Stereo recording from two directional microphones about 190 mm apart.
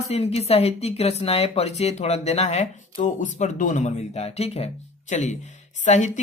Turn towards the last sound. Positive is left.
turn(degrees=40)  # may be behind; listen again after turning